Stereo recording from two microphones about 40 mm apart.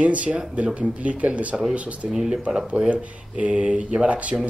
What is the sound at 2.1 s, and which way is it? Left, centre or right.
Speech, centre.